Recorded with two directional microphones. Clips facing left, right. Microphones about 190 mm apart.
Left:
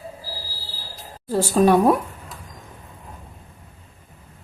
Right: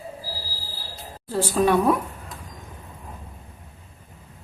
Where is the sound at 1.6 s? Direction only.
40° left (ahead or behind).